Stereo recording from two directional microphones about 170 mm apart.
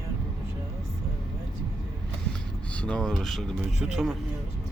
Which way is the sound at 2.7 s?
5° left (ahead or behind).